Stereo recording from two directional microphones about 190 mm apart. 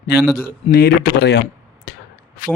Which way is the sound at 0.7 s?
55° left (ahead or behind).